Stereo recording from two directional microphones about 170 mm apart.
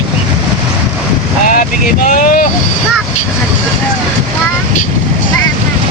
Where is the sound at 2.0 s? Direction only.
50° left (ahead or behind).